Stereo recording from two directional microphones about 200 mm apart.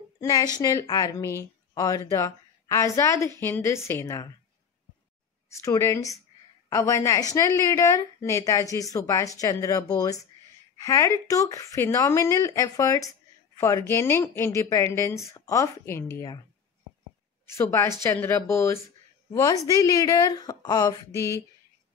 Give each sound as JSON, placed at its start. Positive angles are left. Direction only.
{"t": 0.2, "sound": "a woman's voice", "side_deg": 15}
{"t": 5.5, "sound": "a woman's voice", "side_deg": 15}
{"t": 17.5, "sound": "a woman's voice", "side_deg": 15}